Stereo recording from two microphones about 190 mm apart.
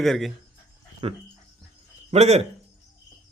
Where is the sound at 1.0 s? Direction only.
30° right (ahead or behind).